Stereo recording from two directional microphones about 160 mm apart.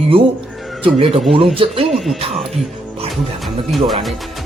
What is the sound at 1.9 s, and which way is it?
Speech, centre (ahead or behind).